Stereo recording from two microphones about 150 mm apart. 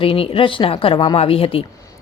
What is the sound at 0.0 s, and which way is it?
A woman's voice, 35° left (ahead or behind).